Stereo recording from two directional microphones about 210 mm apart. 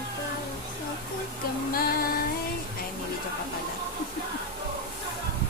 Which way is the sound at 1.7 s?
45° left (ahead or behind).